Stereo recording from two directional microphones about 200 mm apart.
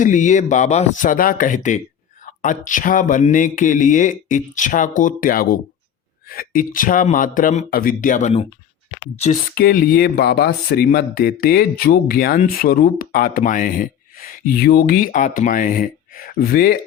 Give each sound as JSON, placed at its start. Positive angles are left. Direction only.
{"t": 0.0, "sound": "speech", "side_deg": 40}
{"t": 9.6, "sound": "speech", "side_deg": 50}